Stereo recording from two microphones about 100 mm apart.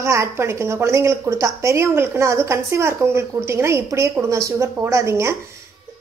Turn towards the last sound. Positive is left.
turn(degrees=-30)  # may be behind; listen again after turning